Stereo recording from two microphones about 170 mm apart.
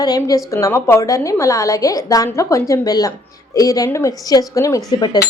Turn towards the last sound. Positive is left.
turn(degrees=25)  # may be behind; listen again after turning